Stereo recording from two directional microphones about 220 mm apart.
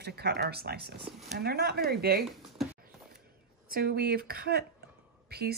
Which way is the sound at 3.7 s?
45° right (ahead or behind).